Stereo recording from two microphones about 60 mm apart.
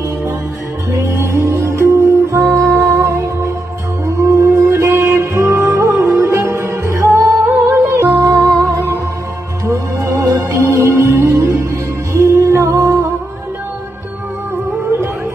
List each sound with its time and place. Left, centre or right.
0.9 s music: right
7.9 s music: right
9.7 s music: right